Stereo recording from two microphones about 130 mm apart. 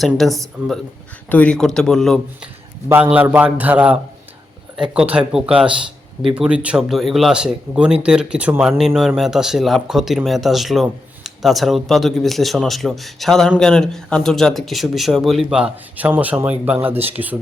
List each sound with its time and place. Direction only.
0.0 s speech: centre (ahead or behind)
2.9 s speech: 10° right (ahead or behind)